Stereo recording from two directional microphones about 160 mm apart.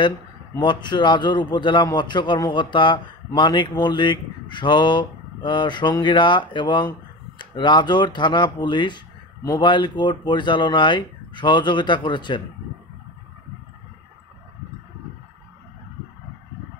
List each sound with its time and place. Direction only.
0.6 s a man's voice: 30° left (ahead or behind)